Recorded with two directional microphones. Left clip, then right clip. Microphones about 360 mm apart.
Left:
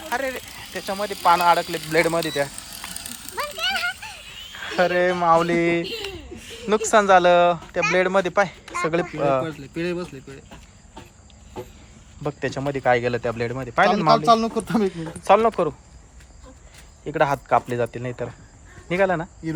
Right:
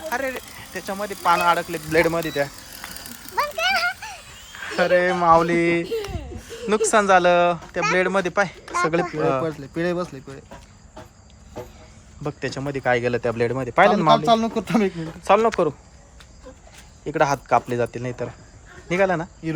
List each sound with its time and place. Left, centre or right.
0.0 s speech: centre
3.3 s a sound: right
4.5 s speech: centre
5.8 s a sound: right
6.7 s speech: centre
8.7 s a sound: centre
9.1 s speech: centre
12.2 s speech: centre
17.1 s speech: centre